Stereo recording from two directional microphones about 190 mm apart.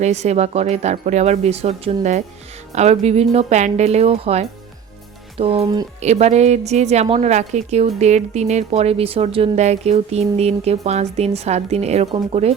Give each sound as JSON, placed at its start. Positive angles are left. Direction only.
{"t": 0.0, "sound": "a woman's voice", "side_deg": -35}